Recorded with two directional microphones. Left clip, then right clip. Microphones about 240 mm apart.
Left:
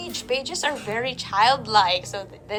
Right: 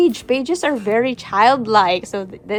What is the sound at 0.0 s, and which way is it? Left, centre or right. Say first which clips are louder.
A woman's voice: right 10 dB; right.